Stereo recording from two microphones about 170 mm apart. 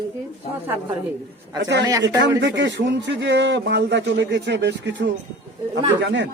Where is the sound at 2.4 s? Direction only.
90° right.